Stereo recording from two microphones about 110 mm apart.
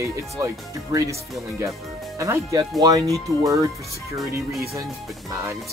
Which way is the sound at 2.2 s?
25° right (ahead or behind).